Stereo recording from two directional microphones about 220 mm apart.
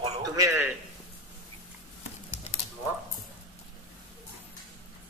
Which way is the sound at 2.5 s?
30° left (ahead or behind).